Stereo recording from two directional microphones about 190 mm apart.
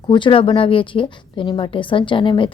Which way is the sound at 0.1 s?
25° left (ahead or behind).